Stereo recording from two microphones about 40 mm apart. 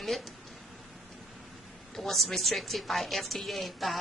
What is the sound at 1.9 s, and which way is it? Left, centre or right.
A woman's voice, centre.